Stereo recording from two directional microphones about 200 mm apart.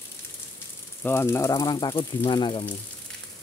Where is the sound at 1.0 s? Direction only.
10° left (ahead or behind).